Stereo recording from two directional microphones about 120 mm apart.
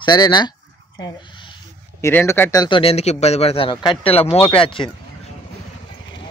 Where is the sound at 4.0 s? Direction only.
50° left (ahead or behind).